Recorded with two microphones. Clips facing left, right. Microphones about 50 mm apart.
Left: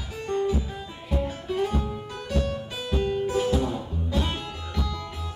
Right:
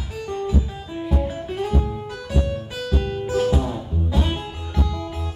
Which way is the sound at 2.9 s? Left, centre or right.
Centre.